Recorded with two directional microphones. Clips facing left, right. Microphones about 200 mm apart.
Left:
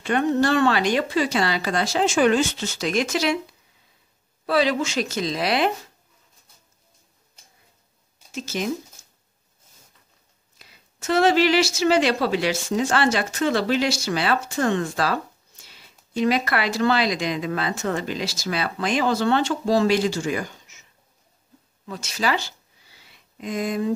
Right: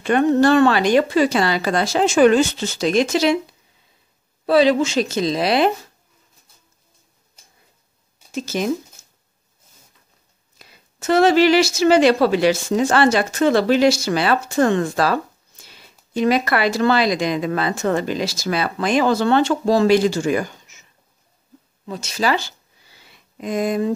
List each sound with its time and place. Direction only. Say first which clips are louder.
0.0 s speech: right 5 dB; 50° right (ahead or behind)
2.6 s speech: right 6 dB; 30° right (ahead or behind)
4.5 s speech: right 6 dB; 25° right (ahead or behind)
10.6 s speech: right 5 dB; 45° right (ahead or behind)
21.8 s speech: right 4 dB; 25° right (ahead or behind)
23.3 s speech: right 5 dB; 45° right (ahead or behind)